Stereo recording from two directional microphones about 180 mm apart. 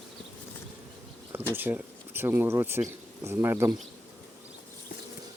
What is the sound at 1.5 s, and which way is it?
Speech, 10° right (ahead or behind).